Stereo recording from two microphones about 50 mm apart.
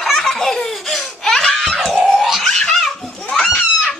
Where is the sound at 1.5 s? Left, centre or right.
Centre.